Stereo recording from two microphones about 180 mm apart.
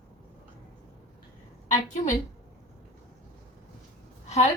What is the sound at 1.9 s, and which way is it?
Speech, 45° left (ahead or behind).